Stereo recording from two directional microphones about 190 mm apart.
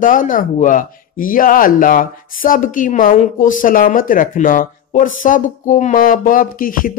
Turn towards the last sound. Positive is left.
turn(degrees=45)  # may be behind; listen again after turning